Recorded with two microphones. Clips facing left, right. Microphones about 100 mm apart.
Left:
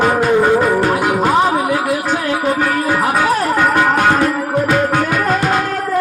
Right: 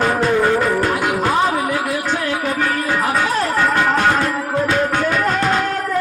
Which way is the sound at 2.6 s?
10° left (ahead or behind).